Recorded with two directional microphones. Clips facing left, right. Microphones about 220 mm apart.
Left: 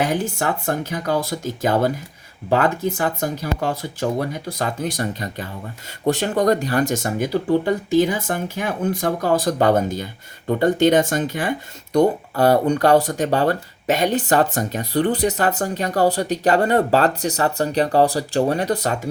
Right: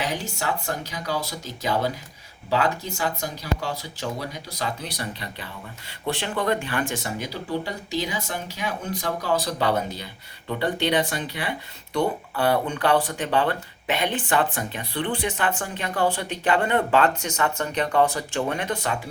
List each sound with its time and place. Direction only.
0.0 s speech: 50° left (ahead or behind)